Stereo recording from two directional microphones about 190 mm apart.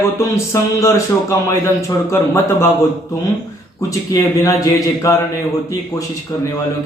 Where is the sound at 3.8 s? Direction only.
15° left (ahead or behind).